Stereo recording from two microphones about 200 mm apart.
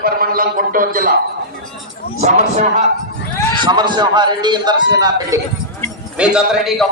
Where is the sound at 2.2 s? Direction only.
35° right (ahead or behind).